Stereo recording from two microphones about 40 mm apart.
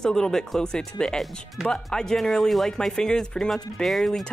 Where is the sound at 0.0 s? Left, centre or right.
Centre.